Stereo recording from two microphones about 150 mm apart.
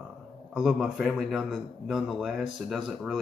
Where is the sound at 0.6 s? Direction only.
Centre (ahead or behind).